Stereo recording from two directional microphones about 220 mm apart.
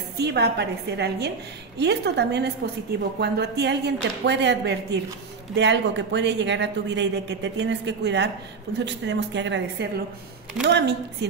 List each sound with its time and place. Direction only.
0.2 s speech: 50° right (ahead or behind)